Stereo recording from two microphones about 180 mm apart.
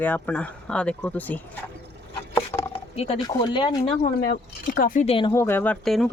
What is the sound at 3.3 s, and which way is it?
Speech, 20° left (ahead or behind).